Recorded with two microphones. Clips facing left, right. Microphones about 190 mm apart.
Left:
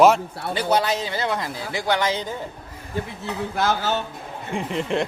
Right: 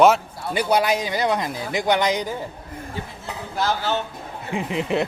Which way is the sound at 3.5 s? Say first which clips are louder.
Even; 55° left (ahead or behind).